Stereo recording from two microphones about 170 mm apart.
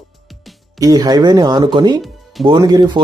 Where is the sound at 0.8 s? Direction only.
20° right (ahead or behind).